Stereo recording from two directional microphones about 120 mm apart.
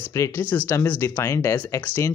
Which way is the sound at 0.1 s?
20° left (ahead or behind).